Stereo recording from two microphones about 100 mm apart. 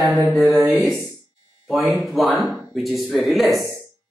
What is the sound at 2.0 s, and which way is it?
A man's voice, centre (ahead or behind).